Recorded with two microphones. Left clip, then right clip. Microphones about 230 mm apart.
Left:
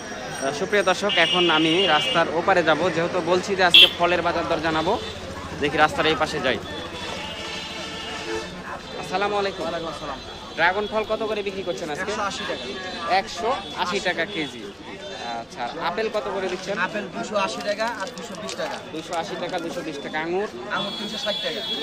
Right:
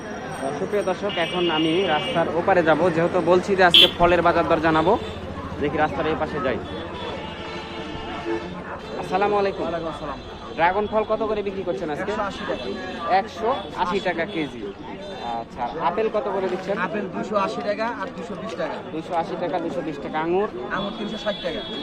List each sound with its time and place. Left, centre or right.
0.7 s speech: left
2.6 s a man's voice: centre
5.6 s speech: centre
6.0 s speech: left
9.1 s a man's voice: centre
10.6 s a man's voice: centre
13.1 s a man's voice: centre
15.8 s a man's voice: centre
17.3 s a man's voice: centre
19.1 s a man's voice: centre